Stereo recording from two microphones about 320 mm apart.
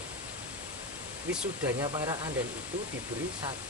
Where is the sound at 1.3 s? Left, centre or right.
Centre.